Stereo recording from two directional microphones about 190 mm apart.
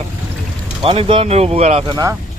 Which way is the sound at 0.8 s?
30° right (ahead or behind).